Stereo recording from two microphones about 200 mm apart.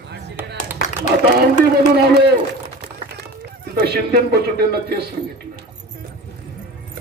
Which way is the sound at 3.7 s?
50° right (ahead or behind).